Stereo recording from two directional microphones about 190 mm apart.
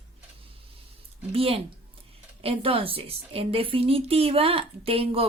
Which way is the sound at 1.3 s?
30° right (ahead or behind).